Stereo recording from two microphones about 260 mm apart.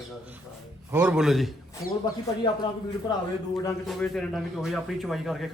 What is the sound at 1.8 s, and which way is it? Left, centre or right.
Speech, left.